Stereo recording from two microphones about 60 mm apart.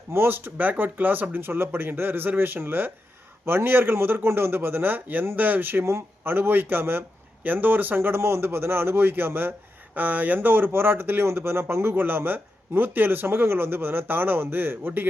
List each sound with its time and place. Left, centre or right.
0.1 s speech: right